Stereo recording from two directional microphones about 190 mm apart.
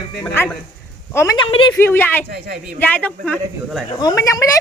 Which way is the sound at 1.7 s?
10° left (ahead or behind).